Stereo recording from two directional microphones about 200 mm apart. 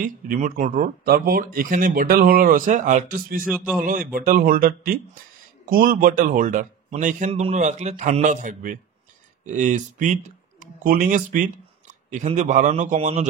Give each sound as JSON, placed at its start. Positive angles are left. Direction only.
{"t": 0.0, "sound": "speech", "side_deg": -40}
{"t": 3.5, "sound": "speech", "side_deg": -5}
{"t": 3.8, "sound": "a man's voice", "side_deg": -45}